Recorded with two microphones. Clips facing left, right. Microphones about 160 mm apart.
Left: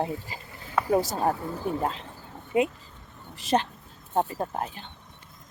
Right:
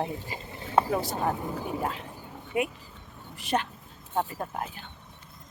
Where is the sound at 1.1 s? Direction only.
40° left (ahead or behind).